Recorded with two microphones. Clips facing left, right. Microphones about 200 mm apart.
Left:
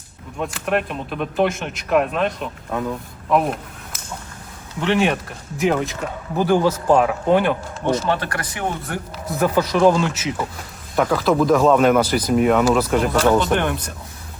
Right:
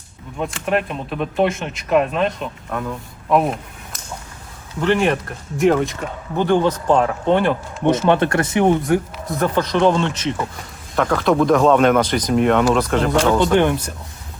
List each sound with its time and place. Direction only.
0.3 s speech: centre (ahead or behind)
3.2 s a sound: centre (ahead or behind)
4.8 s speech: centre (ahead or behind)
8.1 s speech: 25° right (ahead or behind)
9.2 s speech: 5° left (ahead or behind)
13.4 s speech: 15° right (ahead or behind)